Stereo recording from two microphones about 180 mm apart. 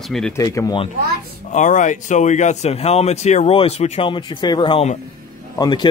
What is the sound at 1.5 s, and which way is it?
Speech, 45° left (ahead or behind).